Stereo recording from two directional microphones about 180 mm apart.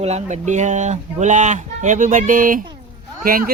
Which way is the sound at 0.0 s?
40° right (ahead or behind).